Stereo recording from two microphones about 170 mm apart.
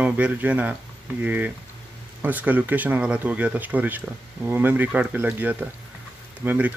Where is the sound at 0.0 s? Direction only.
10° right (ahead or behind).